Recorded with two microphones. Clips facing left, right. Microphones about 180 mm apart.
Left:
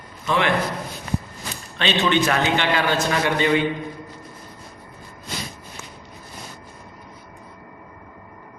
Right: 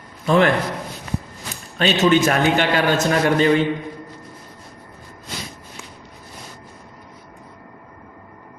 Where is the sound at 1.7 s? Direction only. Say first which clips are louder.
Right 4 dB; 40° right (ahead or behind).